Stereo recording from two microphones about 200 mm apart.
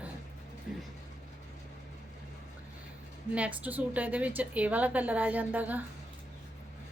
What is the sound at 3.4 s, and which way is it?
A woman's voice, 10° right (ahead or behind).